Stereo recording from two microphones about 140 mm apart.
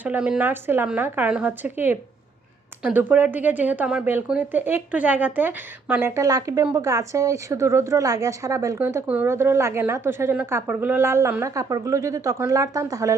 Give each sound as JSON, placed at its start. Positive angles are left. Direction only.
{"t": 0.0, "sound": "a woman's voice", "side_deg": -10}